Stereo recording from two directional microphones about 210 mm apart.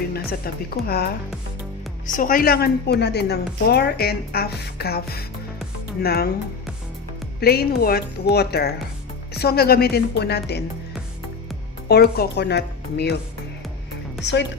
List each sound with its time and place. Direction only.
0.1 s a woman's voice: 45° left (ahead or behind)
7.3 s a woman's voice: 50° left (ahead or behind)
11.9 s a woman's voice: 50° left (ahead or behind)